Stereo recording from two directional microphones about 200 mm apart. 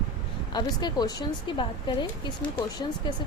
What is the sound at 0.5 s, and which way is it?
A woman's voice, 20° left (ahead or behind).